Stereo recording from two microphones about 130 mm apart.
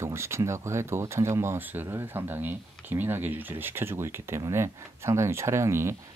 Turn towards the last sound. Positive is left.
turn(degrees=-20)  # may be behind; listen again after turning